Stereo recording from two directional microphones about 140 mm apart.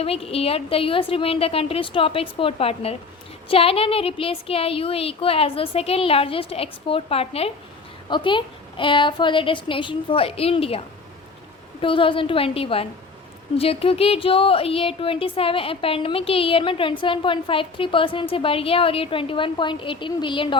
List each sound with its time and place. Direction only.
0.0 s a woman's voice: 45° left (ahead or behind)